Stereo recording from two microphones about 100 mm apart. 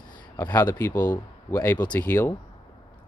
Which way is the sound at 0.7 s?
20° left (ahead or behind).